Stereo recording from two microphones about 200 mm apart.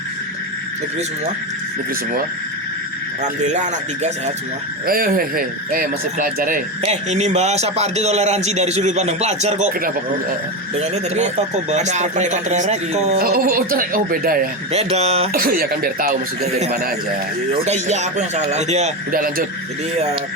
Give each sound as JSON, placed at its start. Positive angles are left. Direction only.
{"t": 3.4, "sound": "a man's voice", "side_deg": -35}
{"t": 4.9, "sound": "speech", "side_deg": -45}
{"t": 6.8, "sound": "a man's voice", "side_deg": -35}
{"t": 13.2, "sound": "speech", "side_deg": -50}
{"t": 14.7, "sound": "a man's voice", "side_deg": -30}
{"t": 15.3, "sound": "speech", "side_deg": -45}
{"t": 17.7, "sound": "a man's voice", "side_deg": -35}